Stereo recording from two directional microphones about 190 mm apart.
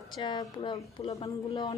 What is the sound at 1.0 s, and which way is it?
Speech, 30° left (ahead or behind).